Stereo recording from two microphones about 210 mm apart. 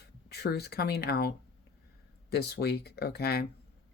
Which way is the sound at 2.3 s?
50° left (ahead or behind).